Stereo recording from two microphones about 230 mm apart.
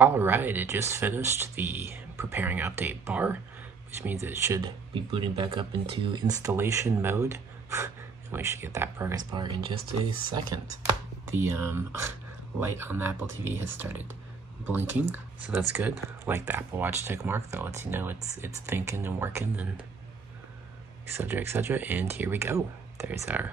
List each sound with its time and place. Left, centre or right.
0.0 s speech: centre
21.1 s speech: centre